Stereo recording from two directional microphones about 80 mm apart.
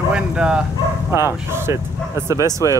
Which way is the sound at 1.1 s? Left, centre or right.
Right.